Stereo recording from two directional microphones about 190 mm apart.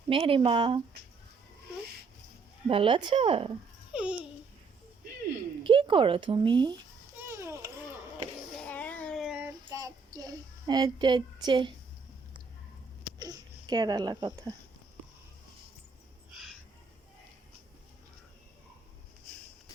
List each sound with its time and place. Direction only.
0.1 s speech: 30° right (ahead or behind)
2.6 s speech: 25° right (ahead or behind)
3.9 s babbling: 5° right (ahead or behind)
5.6 s speech: 25° right (ahead or behind)
7.2 s a sound: 15° right (ahead or behind)
8.5 s a sound: 5° left (ahead or behind)
9.7 s child singing: 20° right (ahead or behind)
13.1 s speech: 20° right (ahead or behind)